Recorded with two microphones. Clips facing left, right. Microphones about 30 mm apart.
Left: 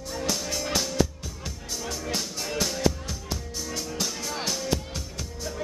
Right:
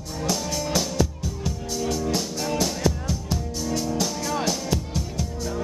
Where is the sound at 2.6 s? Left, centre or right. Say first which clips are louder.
Left 1 dB; centre.